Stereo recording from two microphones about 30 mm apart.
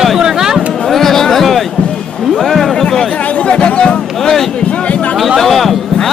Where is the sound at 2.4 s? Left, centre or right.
Centre.